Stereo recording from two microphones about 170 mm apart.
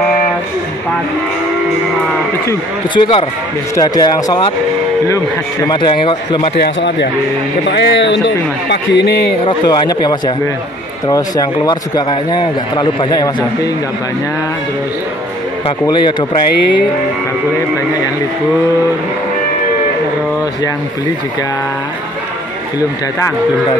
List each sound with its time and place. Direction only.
2.9 s a man's voice: 30° left (ahead or behind)
6.5 s a man's voice: 80° left
9.4 s a man's voice: 25° left (ahead or behind)
15.9 s a man's voice: 25° left (ahead or behind)